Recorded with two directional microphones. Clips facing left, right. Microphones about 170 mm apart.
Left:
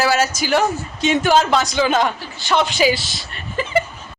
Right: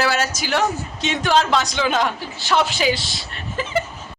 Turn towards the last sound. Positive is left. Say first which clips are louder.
# left 3 dB
turn(degrees=0)  # may be behind; listen again after turning